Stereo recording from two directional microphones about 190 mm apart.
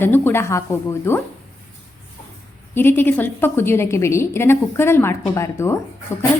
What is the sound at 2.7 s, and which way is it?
A woman's voice, 10° left (ahead or behind).